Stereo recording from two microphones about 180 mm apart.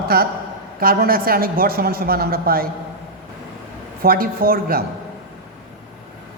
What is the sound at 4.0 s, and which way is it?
Speech, 55° right (ahead or behind).